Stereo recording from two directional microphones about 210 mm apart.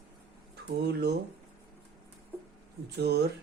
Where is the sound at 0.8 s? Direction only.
50° right (ahead or behind).